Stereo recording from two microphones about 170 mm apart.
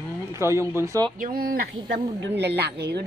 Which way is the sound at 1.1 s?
55° right (ahead or behind).